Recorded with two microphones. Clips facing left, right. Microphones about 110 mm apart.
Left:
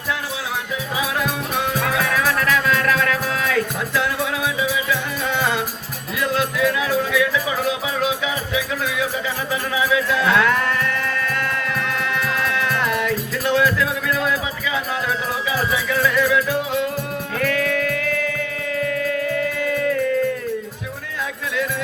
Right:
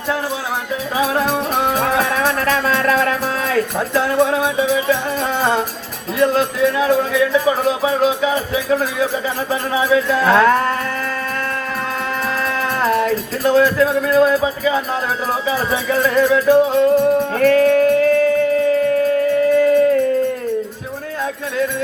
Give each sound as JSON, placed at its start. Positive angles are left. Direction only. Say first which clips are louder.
{"t": 0.9, "sound": "music", "louder": "right 7 dB", "side_deg": -35}
{"t": 4.7, "sound": "music", "louder": "right 6 dB", "side_deg": -45}
{"t": 12.2, "sound": "music", "louder": "right 3 dB", "side_deg": -35}